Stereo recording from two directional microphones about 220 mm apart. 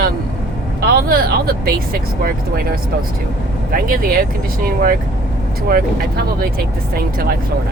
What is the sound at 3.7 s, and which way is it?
Speech, 40° right (ahead or behind).